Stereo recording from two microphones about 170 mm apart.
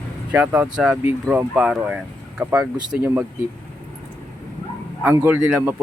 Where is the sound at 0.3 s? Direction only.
5° right (ahead or behind).